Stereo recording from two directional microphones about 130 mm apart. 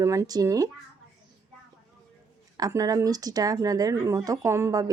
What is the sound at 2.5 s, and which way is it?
Speech, 30° right (ahead or behind).